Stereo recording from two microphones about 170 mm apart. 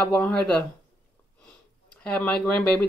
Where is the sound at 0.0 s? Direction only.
10° left (ahead or behind).